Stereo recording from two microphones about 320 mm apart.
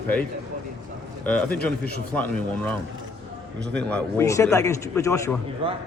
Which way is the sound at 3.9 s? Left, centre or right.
Centre.